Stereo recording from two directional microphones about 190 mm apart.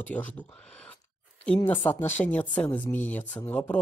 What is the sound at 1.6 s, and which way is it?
Speech, 20° left (ahead or behind).